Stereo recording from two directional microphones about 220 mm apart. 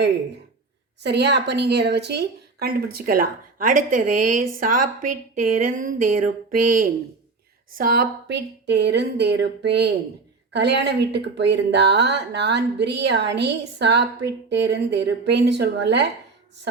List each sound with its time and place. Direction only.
1.0 s speech: 50° right (ahead or behind)
5.3 s a sound: 40° right (ahead or behind)
7.8 s speech: 40° right (ahead or behind)